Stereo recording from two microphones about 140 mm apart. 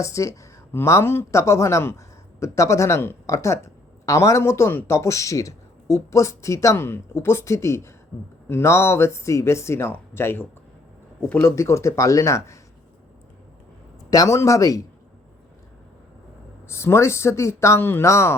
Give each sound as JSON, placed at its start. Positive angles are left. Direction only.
{"t": 0.0, "sound": "a woman's voice", "side_deg": 20}
{"t": 14.1, "sound": "a woman's voice", "side_deg": 25}
{"t": 16.6, "sound": "a woman's voice", "side_deg": 20}